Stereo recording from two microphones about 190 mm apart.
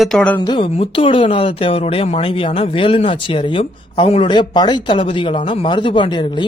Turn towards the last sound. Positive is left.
turn(degrees=25)  # may be behind; listen again after turning